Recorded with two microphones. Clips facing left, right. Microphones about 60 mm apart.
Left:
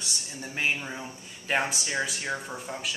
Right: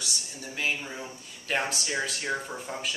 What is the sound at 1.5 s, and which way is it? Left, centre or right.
Speech, centre.